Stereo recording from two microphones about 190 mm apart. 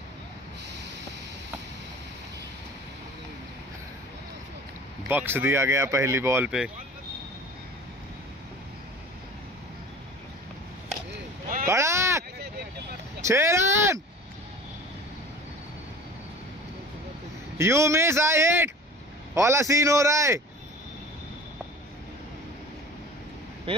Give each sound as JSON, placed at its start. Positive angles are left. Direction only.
{"t": 5.0, "sound": "speech", "side_deg": -10}
{"t": 11.6, "sound": "boat", "side_deg": -15}
{"t": 13.2, "sound": "a sound", "side_deg": -15}
{"t": 17.6, "sound": "speech", "side_deg": -15}